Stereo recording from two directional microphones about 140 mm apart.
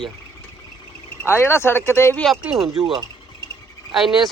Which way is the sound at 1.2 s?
15° left (ahead or behind).